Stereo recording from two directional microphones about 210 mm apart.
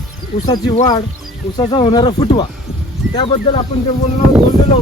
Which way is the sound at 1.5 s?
20° left (ahead or behind).